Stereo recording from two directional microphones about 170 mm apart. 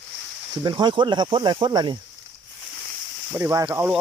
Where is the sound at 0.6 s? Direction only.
25° right (ahead or behind).